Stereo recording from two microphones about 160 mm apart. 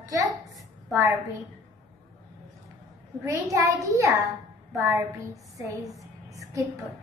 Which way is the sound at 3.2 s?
20° right (ahead or behind).